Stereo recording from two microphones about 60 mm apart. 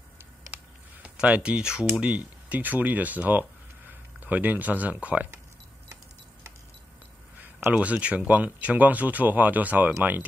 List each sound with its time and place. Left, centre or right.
1.0 s speech: right
2.0 s speech: right
7.7 s speech: right